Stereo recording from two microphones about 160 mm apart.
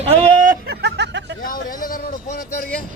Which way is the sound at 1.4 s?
60° left (ahead or behind).